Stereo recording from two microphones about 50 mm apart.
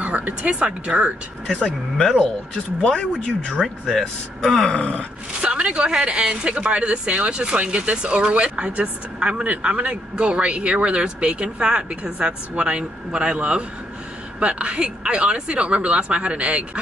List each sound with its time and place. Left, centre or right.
0.0 s speech: right
2.8 s speech: centre
4.7 s groan: left
5.4 s a woman's voice: right